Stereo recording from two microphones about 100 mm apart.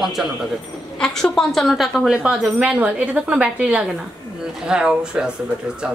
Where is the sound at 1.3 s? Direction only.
5° left (ahead or behind).